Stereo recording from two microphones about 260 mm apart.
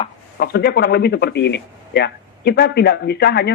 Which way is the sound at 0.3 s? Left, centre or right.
Left.